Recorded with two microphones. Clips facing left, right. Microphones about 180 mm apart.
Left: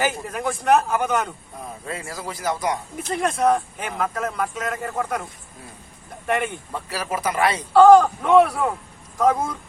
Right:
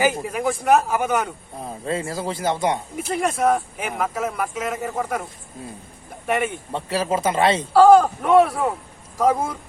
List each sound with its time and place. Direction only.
0.0 s speech: 10° right (ahead or behind)
1.6 s speech: 30° right (ahead or behind)
3.0 s speech: 5° right (ahead or behind)
6.2 s speech: 5° right (ahead or behind)
6.7 s speech: 25° right (ahead or behind)
7.7 s speech: 5° right (ahead or behind)